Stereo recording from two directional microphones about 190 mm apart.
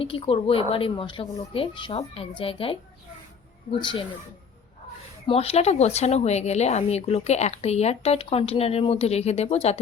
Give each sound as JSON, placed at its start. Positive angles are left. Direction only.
{"t": 0.0, "sound": "speech", "side_deg": 30}
{"t": 5.2, "sound": "speech", "side_deg": 30}